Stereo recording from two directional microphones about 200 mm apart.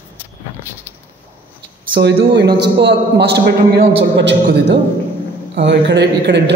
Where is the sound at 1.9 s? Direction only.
60° right (ahead or behind).